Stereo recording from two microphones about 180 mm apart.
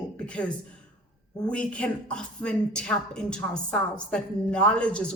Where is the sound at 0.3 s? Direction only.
5° left (ahead or behind).